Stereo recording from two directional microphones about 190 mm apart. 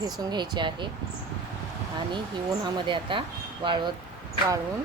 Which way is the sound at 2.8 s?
25° right (ahead or behind).